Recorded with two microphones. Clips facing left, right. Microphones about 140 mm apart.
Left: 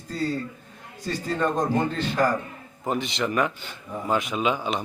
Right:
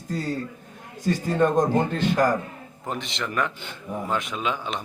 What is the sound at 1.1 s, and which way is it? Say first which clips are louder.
Speech: right 4 dB; 20° right (ahead or behind).